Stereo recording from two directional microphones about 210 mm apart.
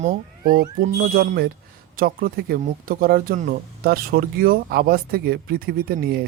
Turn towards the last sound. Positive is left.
turn(degrees=-45)  # may be behind; listen again after turning